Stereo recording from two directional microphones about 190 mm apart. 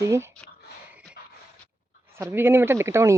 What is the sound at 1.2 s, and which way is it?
Dog, 60° left (ahead or behind).